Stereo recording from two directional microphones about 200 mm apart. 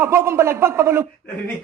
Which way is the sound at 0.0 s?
15° right (ahead or behind).